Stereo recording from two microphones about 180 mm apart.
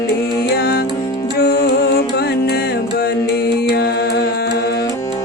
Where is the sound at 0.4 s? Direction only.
60° left (ahead or behind).